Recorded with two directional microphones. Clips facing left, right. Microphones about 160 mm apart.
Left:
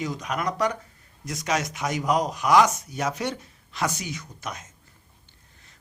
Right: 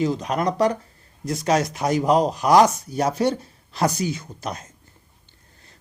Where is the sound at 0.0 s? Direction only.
30° right (ahead or behind).